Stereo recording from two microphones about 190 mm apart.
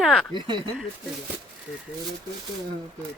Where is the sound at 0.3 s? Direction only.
25° right (ahead or behind).